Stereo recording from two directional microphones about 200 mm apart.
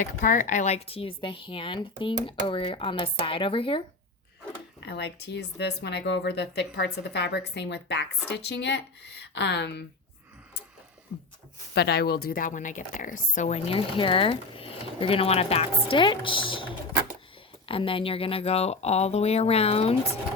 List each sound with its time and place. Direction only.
0.0 s speech: 40° left (ahead or behind)
4.8 s speech: 55° left (ahead or behind)
11.7 s a woman's voice: 55° left (ahead or behind); by 20.0 s 30° left (ahead or behind)